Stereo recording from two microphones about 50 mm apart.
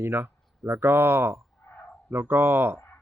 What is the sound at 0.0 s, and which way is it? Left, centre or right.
Speech, right.